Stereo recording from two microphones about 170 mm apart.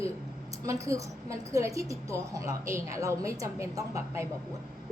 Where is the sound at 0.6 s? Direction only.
20° right (ahead or behind).